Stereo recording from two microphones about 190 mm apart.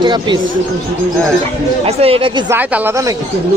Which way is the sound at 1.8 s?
30° right (ahead or behind).